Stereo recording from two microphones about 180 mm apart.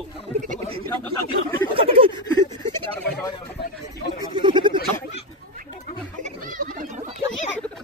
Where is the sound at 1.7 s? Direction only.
30° right (ahead or behind).